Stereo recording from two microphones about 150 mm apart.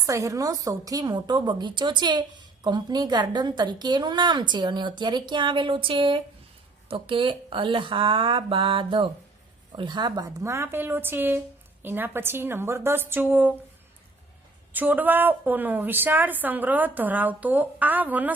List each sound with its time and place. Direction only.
0.0 s a woman's voice: 20° right (ahead or behind)
14.7 s a woman's voice: 10° right (ahead or behind)